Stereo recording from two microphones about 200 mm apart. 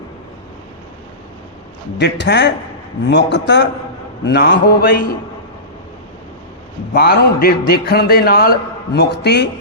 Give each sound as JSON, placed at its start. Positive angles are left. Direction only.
{"t": 2.0, "sound": "a man's voice", "side_deg": 60}
{"t": 6.9, "sound": "a man's voice", "side_deg": 55}